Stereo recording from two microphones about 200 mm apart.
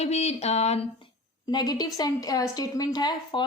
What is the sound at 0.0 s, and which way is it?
Speech, 30° left (ahead or behind).